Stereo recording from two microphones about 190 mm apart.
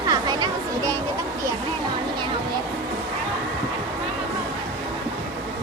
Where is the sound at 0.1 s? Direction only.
20° right (ahead or behind).